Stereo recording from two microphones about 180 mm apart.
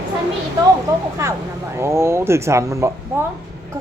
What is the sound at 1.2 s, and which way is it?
A child's voice, 15° right (ahead or behind).